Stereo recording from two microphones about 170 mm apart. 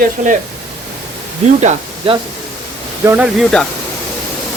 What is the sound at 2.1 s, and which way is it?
Speech, 35° right (ahead or behind).